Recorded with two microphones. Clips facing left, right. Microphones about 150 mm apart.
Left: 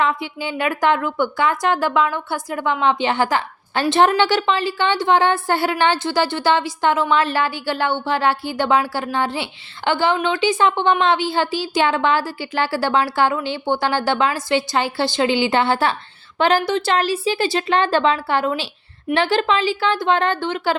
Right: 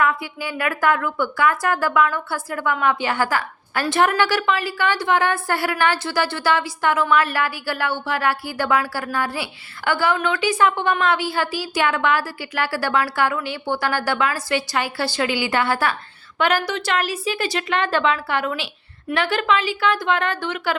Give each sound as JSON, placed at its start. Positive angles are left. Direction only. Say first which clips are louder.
{"t": 0.0, "sound": "a woman's voice", "louder": "left 1 dB", "side_deg": 25}